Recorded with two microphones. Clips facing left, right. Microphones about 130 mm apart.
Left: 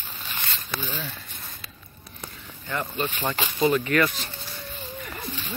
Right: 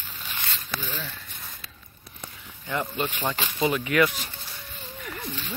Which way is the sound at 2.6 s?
15° right (ahead or behind).